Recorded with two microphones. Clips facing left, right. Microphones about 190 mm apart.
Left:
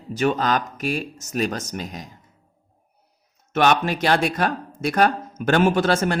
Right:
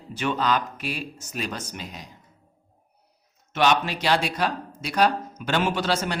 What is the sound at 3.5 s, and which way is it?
Speech, 50° left (ahead or behind).